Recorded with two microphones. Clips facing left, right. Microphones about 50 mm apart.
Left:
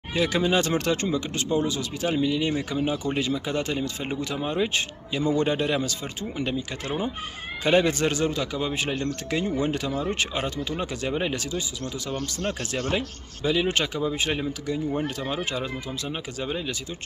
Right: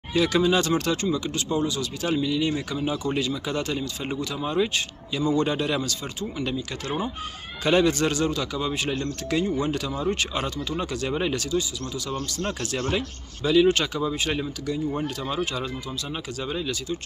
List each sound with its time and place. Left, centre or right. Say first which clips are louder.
0.1 s speech: right 2 dB; left
12.9 s speech: even; centre